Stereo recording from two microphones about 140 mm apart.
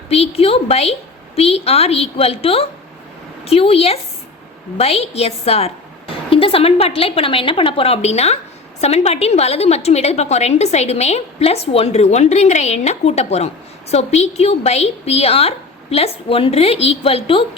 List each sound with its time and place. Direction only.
0.1 s a woman's voice: 45° left (ahead or behind)